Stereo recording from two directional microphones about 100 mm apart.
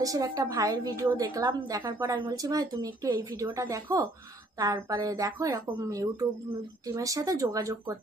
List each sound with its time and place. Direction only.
0.0 s speech: 35° right (ahead or behind)